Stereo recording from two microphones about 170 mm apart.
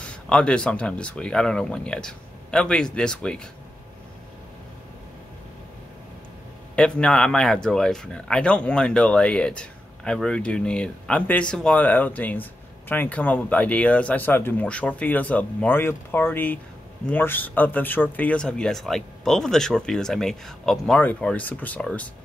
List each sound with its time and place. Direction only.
0.0 s speech: 5° left (ahead or behind)
6.7 s speech: 5° left (ahead or behind)